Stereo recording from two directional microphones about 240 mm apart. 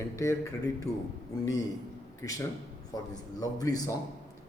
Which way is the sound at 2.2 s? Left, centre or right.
Centre.